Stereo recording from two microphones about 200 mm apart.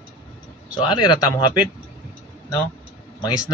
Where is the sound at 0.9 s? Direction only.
20° left (ahead or behind).